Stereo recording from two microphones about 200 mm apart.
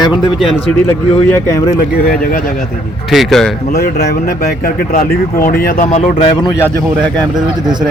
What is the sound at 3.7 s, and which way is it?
Speech, 50° left (ahead or behind).